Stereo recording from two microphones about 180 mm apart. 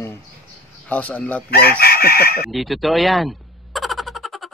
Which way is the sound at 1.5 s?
60° left (ahead or behind).